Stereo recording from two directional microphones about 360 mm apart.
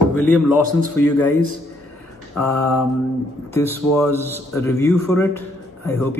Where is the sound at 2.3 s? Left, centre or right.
Centre.